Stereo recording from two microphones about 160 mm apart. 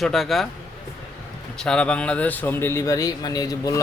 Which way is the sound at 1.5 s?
5° left (ahead or behind).